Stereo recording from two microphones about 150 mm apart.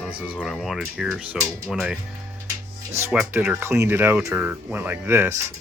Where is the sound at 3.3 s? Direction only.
15° right (ahead or behind).